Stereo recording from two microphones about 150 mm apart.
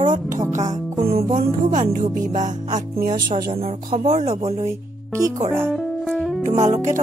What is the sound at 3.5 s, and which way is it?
Speech, 40° right (ahead or behind).